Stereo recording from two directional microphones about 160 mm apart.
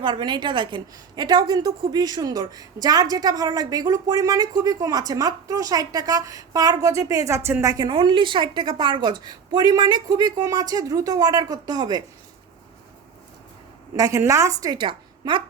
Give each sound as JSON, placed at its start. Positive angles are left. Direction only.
{"t": 0.0, "sound": "a woman's voice", "side_deg": -30}
{"t": 13.9, "sound": "a woman's voice", "side_deg": -20}